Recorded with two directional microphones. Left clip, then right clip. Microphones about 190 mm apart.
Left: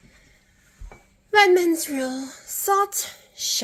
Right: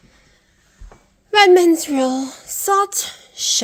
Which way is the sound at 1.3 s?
35° right (ahead or behind).